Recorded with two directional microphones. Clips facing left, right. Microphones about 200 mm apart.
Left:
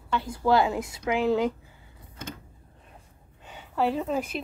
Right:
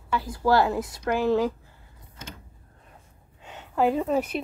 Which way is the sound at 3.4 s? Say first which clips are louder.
Right 3 dB; 5° left (ahead or behind).